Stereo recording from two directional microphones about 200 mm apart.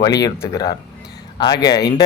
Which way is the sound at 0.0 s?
20° left (ahead or behind).